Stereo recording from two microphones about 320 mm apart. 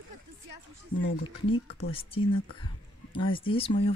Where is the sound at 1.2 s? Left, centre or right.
Left.